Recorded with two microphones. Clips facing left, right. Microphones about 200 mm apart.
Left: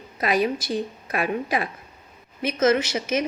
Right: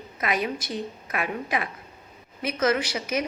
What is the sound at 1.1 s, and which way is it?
A woman's voice, 30° left (ahead or behind).